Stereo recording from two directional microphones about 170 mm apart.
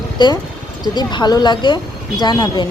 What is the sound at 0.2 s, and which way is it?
Speech, 25° left (ahead or behind).